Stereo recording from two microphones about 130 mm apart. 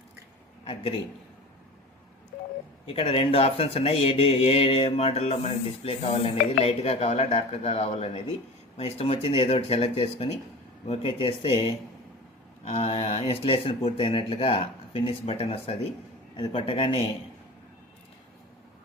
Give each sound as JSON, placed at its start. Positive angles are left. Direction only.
{"t": 0.6, "sound": "a man's voice", "side_deg": 50}
{"t": 2.8, "sound": "speech", "side_deg": 50}